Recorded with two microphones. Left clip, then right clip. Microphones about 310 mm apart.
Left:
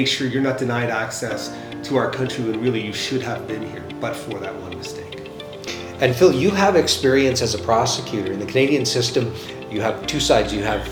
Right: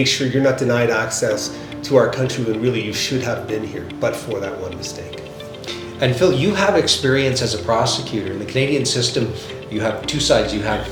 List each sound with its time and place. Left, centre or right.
0.0 s speech: right
6.0 s speech: left